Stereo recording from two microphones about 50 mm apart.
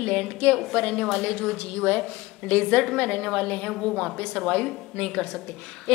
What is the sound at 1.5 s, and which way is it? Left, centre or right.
A woman's voice, left.